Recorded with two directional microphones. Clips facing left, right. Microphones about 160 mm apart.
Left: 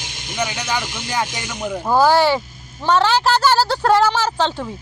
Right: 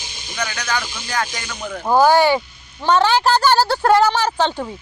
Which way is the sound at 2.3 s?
Centre (ahead or behind).